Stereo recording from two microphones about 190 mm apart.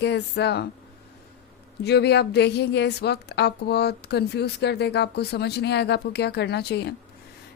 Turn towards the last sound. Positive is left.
turn(degrees=60)  # may be behind; listen again after turning